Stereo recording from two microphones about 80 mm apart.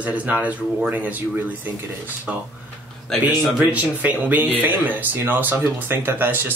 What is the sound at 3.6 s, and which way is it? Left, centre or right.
Speech, centre.